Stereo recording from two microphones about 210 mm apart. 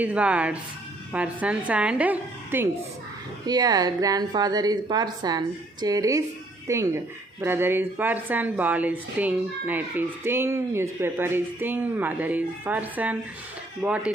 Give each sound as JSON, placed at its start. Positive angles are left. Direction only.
{"t": 0.0, "sound": "speech", "side_deg": -5}
{"t": 3.4, "sound": "a woman's voice", "side_deg": -20}